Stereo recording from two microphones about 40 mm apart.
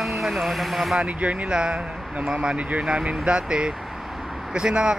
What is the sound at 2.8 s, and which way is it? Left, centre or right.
Speech, right.